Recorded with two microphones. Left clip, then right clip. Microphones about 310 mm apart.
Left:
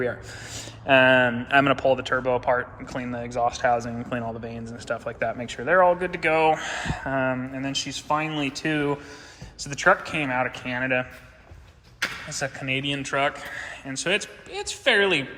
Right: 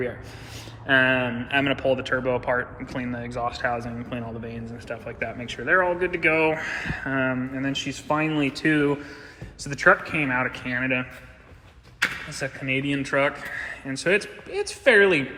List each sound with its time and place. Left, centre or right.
0.5 s speech: centre
12.3 s speech: centre